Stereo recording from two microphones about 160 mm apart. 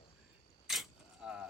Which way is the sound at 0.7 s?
5° right (ahead or behind).